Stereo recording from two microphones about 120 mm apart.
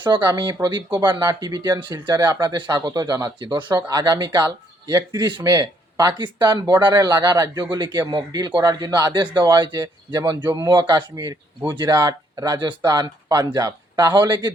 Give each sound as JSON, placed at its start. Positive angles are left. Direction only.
{"t": 0.0, "sound": "speech", "side_deg": -35}